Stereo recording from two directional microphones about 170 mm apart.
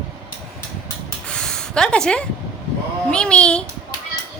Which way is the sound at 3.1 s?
5° left (ahead or behind).